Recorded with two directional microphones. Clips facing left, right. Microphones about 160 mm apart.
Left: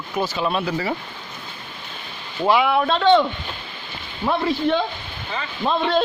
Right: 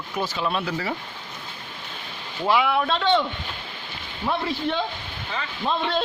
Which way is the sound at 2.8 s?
45° left (ahead or behind).